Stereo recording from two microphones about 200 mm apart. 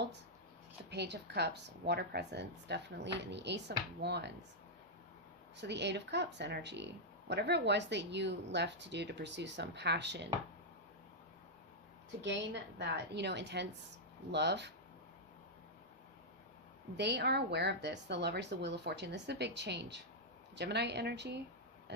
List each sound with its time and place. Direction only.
0.9 s speech: 55° right (ahead or behind)
5.5 s speech: 60° right (ahead or behind)
12.2 s speech: 60° right (ahead or behind)
17.0 s speech: 60° right (ahead or behind)